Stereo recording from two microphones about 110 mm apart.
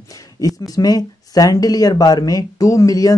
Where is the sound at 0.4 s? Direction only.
35° left (ahead or behind).